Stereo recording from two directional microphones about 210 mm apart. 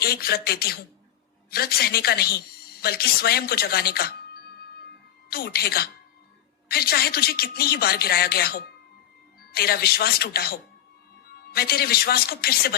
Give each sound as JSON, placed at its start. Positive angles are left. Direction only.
{"t": 0.0, "sound": "a woman's voice", "side_deg": 45}
{"t": 5.3, "sound": "a woman's voice", "side_deg": 45}